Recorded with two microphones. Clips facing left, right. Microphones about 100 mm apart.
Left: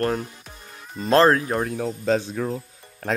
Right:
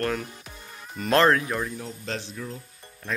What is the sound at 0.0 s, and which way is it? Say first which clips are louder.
Speech: left 4 dB; 35° left (ahead or behind).